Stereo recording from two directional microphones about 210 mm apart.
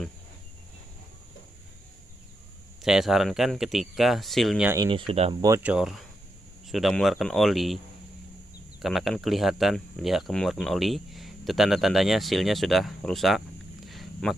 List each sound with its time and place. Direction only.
2.8 s speech: centre (ahead or behind)
4.8 s speech: 25° right (ahead or behind)
5.6 s speech: 5° right (ahead or behind)
8.8 s speech: centre (ahead or behind)
13.8 s a sound: centre (ahead or behind)